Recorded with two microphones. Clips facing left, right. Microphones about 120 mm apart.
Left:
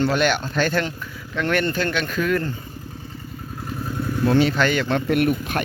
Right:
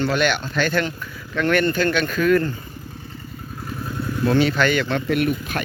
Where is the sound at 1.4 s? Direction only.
25° left (ahead or behind).